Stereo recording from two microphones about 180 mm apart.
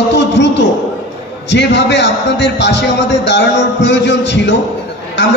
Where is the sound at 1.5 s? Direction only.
75° left (ahead or behind).